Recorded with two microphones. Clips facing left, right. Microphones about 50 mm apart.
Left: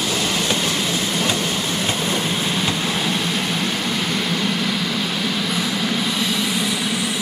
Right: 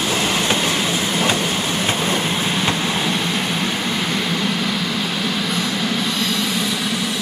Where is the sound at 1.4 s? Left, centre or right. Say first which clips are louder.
Right 2 dB; right.